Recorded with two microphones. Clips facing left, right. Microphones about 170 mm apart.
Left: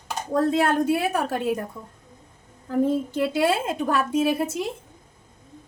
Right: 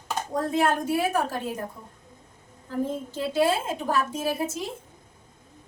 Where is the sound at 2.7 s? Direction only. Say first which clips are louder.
Left 7 dB; 65° left (ahead or behind).